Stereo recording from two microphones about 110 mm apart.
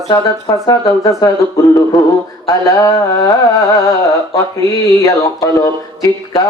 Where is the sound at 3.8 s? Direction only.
30° left (ahead or behind).